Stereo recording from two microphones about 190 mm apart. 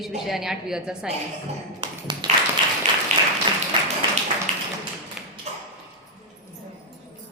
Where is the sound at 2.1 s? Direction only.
25° right (ahead or behind).